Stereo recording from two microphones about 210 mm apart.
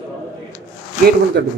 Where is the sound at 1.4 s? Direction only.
50° right (ahead or behind).